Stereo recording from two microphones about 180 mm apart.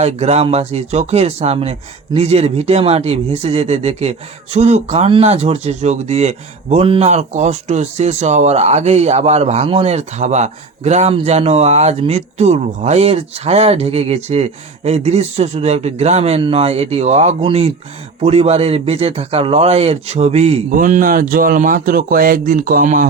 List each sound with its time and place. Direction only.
0.0 s speech: 35° right (ahead or behind)
20.7 s speech: 50° right (ahead or behind)